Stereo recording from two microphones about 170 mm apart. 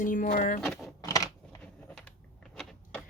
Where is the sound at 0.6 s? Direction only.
Centre (ahead or behind).